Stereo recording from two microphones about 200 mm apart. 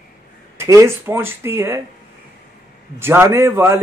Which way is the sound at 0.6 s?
15° right (ahead or behind).